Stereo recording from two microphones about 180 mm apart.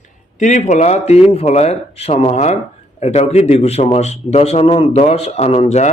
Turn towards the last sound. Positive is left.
turn(degrees=35)  # may be behind; listen again after turning